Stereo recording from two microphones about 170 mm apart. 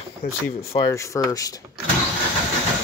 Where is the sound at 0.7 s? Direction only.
15° left (ahead or behind).